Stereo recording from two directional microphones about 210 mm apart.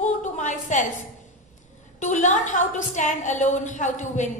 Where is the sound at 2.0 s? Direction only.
35° left (ahead or behind).